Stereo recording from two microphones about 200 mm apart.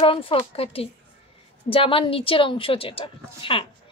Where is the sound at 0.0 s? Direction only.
25° left (ahead or behind).